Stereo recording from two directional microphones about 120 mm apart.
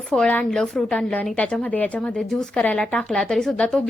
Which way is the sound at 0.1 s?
10° left (ahead or behind).